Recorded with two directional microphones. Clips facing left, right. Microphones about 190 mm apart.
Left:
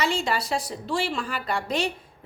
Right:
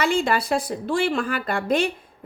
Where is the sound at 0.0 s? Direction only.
55° right (ahead or behind).